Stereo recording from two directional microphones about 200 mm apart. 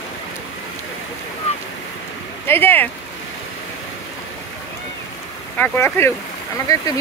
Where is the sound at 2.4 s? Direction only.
10° left (ahead or behind).